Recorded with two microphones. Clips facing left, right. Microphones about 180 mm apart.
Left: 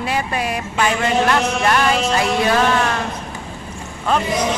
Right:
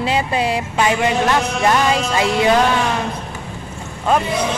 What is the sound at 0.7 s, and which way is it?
Speech, 15° right (ahead or behind).